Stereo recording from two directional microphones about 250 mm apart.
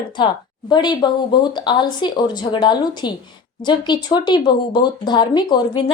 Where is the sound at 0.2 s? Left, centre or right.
Centre.